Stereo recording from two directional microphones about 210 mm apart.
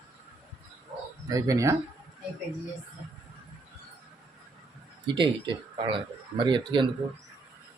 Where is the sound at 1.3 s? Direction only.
15° right (ahead or behind).